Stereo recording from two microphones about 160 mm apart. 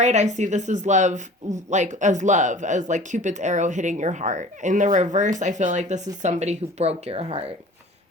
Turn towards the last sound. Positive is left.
turn(degrees=-40)  # may be behind; listen again after turning